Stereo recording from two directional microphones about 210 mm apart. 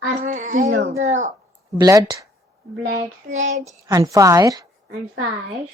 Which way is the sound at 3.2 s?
35° right (ahead or behind).